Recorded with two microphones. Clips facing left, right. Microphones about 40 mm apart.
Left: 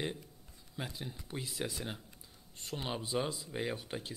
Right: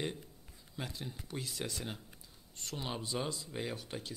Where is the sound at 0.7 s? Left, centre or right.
Centre.